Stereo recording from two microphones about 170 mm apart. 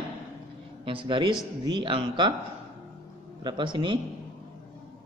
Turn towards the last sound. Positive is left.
turn(degrees=-30)  # may be behind; listen again after turning